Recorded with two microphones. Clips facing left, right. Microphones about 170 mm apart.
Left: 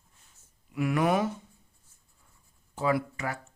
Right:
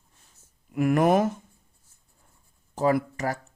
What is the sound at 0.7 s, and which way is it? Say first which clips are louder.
Speech: right 5 dB; 45° right (ahead or behind).